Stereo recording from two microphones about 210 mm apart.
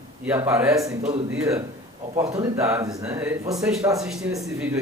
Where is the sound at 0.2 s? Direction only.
10° right (ahead or behind).